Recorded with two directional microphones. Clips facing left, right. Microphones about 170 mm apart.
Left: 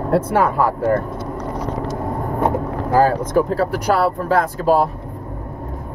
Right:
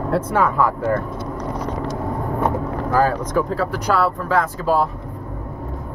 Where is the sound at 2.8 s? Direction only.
30° left (ahead or behind).